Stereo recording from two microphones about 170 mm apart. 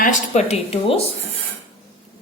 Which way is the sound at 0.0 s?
45° left (ahead or behind).